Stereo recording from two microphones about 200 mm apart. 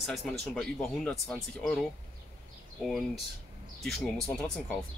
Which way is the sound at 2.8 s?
Centre (ahead or behind).